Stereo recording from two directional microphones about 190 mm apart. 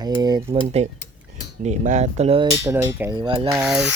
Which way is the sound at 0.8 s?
35° right (ahead or behind).